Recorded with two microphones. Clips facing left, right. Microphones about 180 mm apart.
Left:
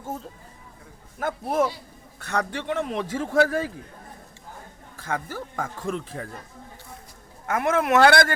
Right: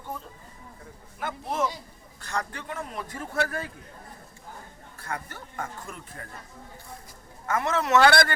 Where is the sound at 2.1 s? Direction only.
65° left (ahead or behind); by 3.6 s 90° left.